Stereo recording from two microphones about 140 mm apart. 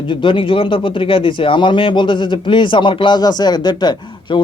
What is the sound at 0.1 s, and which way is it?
Speech, 40° left (ahead or behind).